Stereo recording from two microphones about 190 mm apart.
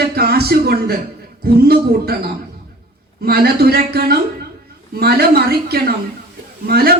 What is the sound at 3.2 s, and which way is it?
A man's voice, 55° right (ahead or behind).